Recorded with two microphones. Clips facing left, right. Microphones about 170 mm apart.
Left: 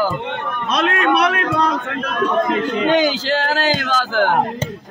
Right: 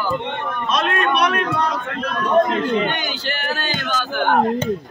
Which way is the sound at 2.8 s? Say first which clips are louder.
Left 8 dB; 90° left.